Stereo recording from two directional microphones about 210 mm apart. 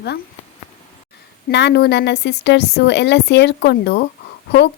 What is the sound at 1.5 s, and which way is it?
A woman's voice, 55° left (ahead or behind).